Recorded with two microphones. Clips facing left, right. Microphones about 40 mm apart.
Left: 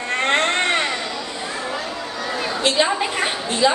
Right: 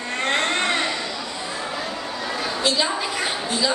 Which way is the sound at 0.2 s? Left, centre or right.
Left.